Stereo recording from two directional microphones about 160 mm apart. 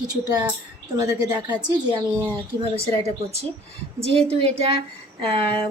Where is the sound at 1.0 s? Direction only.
25° right (ahead or behind).